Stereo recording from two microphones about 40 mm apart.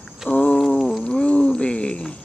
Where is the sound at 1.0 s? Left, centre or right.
Left.